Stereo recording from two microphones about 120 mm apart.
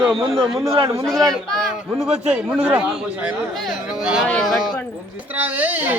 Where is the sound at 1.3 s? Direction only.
Centre (ahead or behind).